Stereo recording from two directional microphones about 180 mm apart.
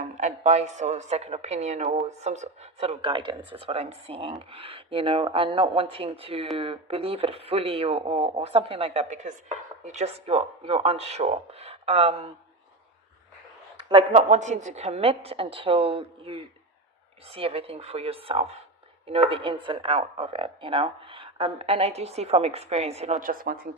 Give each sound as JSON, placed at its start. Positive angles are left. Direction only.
{"t": 0.0, "sound": "speech", "side_deg": -40}
{"t": 13.8, "sound": "speech", "side_deg": -30}